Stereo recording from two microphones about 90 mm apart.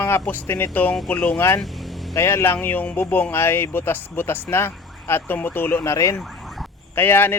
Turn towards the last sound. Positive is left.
turn(degrees=25)  # may be behind; listen again after turning